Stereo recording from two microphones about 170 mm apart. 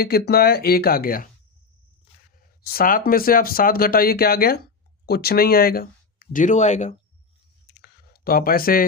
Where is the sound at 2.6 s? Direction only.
60° left (ahead or behind); by 7.0 s 45° left (ahead or behind).